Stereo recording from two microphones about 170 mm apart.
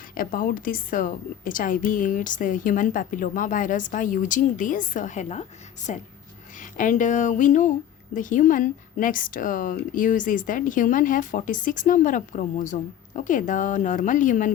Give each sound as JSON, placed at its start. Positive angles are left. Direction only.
{"t": 0.1, "sound": "speech", "side_deg": 55}